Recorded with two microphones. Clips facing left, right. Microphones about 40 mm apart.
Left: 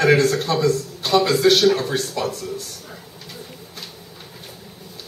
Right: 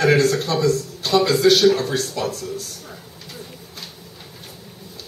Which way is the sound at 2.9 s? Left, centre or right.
Centre.